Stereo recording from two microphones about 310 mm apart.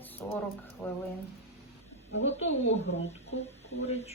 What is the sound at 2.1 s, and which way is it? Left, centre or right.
A woman's voice, left.